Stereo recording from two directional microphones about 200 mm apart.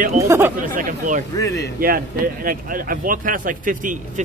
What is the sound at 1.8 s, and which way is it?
Speech, 45° right (ahead or behind).